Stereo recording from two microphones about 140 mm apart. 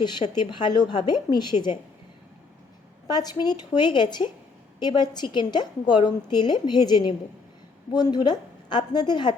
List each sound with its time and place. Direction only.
0.0 s a woman's voice: 30° left (ahead or behind)
3.4 s a woman's voice: 30° left (ahead or behind)